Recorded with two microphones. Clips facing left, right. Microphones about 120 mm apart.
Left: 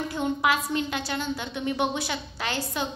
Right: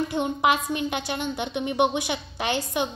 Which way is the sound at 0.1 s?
20° right (ahead or behind).